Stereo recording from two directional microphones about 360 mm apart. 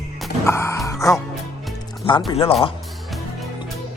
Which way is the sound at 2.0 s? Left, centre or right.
Centre.